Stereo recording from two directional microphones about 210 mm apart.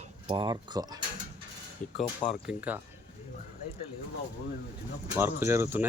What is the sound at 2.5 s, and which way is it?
Speech, 10° right (ahead or behind).